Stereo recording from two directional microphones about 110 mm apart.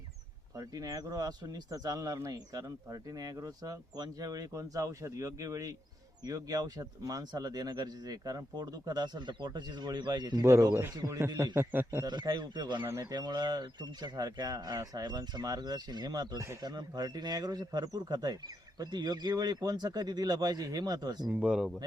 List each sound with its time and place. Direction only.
0.5 s speech: 35° right (ahead or behind)
10.4 s speech: 30° right (ahead or behind)
11.3 s speech: 40° right (ahead or behind)
11.5 s speech: 20° right (ahead or behind)
12.0 s speech: 45° right (ahead or behind)
16.4 s speech: 25° right (ahead or behind)
16.6 s speech: 40° right (ahead or behind)
21.2 s speech: 10° right (ahead or behind)